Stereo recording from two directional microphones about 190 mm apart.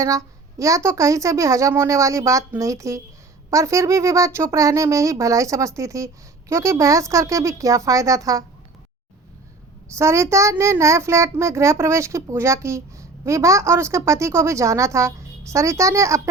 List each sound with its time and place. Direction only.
0.0 s child singing: 15° right (ahead or behind)
9.9 s child singing: 15° right (ahead or behind)